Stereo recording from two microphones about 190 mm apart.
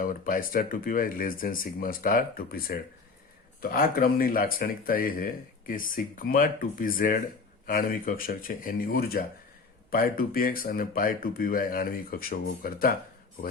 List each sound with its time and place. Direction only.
0.0 s speech: 45° left (ahead or behind)